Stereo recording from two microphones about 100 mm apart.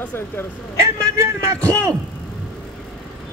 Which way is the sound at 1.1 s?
30° right (ahead or behind).